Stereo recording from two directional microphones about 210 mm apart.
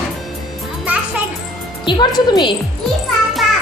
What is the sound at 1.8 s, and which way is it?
Speech, 20° left (ahead or behind).